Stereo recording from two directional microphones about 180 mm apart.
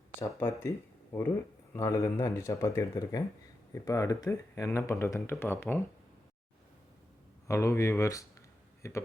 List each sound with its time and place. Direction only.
0.2 s speech: 10° left (ahead or behind)
1.7 s speech: 15° left (ahead or behind)
7.4 s speech: 15° left (ahead or behind)